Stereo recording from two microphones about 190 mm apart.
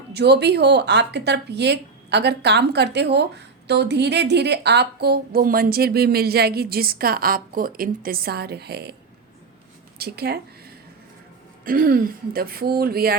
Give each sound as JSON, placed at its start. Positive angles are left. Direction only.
{"t": 0.1, "sound": "speech", "side_deg": -60}
{"t": 10.0, "sound": "speech", "side_deg": -55}